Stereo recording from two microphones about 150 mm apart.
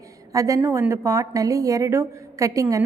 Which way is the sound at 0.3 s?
20° right (ahead or behind).